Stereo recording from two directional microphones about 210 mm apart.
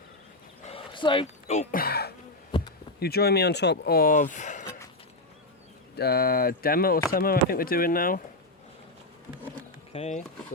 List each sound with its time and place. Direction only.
0.6 s a sound: 25° left (ahead or behind); by 2.1 s 50° left (ahead or behind)
3.0 s speech: 50° left (ahead or behind)
6.0 s speech: 50° left (ahead or behind)
9.9 s speech: 30° left (ahead or behind)